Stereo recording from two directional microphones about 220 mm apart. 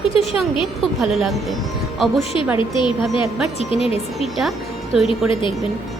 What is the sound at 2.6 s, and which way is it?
A woman's voice, 20° left (ahead or behind).